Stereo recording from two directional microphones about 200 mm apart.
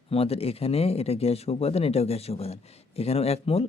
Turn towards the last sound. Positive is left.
turn(degrees=30)  # may be behind; listen again after turning